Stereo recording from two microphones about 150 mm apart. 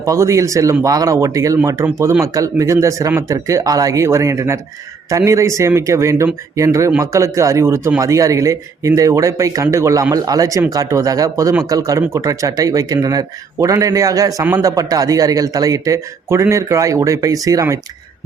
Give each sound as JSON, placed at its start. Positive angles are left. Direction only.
{"t": 0.0, "sound": "a man's voice", "side_deg": -20}